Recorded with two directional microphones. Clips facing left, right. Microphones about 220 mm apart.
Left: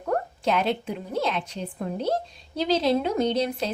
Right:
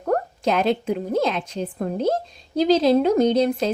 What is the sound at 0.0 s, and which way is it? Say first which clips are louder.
A woman's voice: right 4 dB; 45° right (ahead or behind).